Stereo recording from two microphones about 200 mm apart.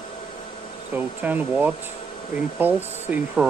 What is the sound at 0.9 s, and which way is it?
Speech, 10° right (ahead or behind).